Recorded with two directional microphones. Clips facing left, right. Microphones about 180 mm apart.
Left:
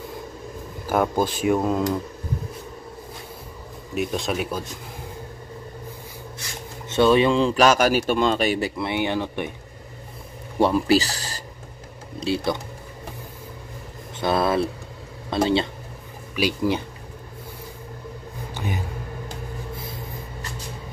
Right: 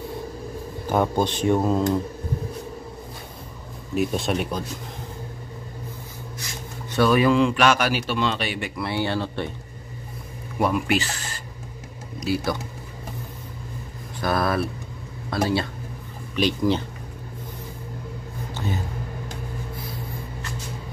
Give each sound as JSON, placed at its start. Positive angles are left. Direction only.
{"t": 0.8, "sound": "speech", "side_deg": 5}
{"t": 3.9, "sound": "speech", "side_deg": 0}
{"t": 6.9, "sound": "a man's voice", "side_deg": 25}
{"t": 8.7, "sound": "speech", "side_deg": 20}
{"t": 10.6, "sound": "speech", "side_deg": 30}
{"t": 14.2, "sound": "speech", "side_deg": 25}
{"t": 16.3, "sound": "speech", "side_deg": 10}
{"t": 18.5, "sound": "a sound", "side_deg": 15}